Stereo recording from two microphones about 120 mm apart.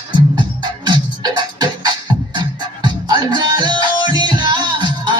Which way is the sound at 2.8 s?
40° right (ahead or behind).